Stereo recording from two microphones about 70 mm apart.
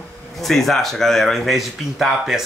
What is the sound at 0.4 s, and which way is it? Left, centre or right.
Speech, centre.